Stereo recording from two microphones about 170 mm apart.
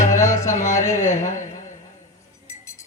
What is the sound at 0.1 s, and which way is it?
Music, 15° left (ahead or behind).